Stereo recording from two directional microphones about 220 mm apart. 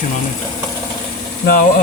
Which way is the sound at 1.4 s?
40° left (ahead or behind).